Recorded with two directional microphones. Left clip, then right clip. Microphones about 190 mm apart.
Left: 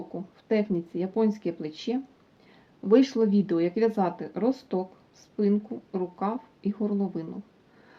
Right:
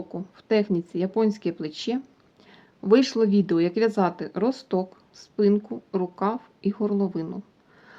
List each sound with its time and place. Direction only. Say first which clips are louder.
0.3 s speech: right 4 dB; 25° right (ahead or behind)